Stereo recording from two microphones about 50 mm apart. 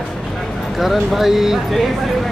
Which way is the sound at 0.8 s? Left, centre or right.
Centre.